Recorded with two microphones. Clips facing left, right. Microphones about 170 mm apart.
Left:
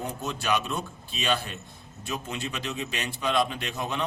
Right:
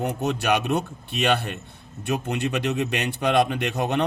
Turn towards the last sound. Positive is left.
turn(degrees=-65)  # may be behind; listen again after turning